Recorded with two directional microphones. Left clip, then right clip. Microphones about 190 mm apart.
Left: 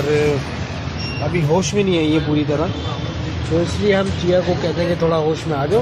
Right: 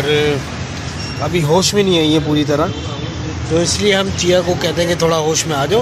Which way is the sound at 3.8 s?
15° right (ahead or behind).